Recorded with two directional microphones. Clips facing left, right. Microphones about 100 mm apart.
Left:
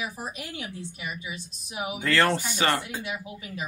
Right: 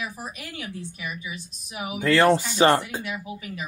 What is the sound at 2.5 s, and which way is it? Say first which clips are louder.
Speech: right 7 dB; 30° right (ahead or behind).